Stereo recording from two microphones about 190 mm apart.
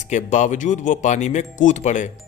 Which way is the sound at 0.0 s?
40° left (ahead or behind).